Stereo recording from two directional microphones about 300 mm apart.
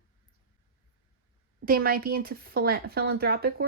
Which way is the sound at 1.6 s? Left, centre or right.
Right.